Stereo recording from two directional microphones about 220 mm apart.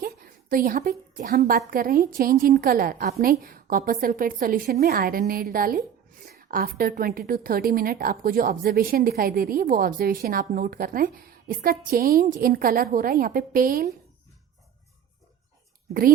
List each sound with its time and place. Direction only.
0.5 s a woman's voice: 40° right (ahead or behind)